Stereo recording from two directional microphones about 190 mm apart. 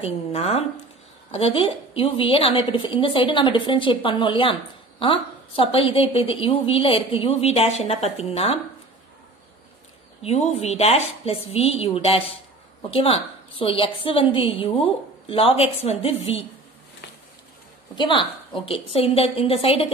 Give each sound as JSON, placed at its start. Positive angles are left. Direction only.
{"t": 0.0, "sound": "a woman's voice", "side_deg": 30}
{"t": 10.2, "sound": "a woman's voice", "side_deg": 35}
{"t": 17.9, "sound": "a woman's voice", "side_deg": 25}